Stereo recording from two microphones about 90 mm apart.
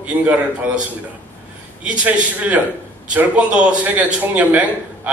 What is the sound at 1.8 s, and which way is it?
A man's voice, 15° right (ahead or behind).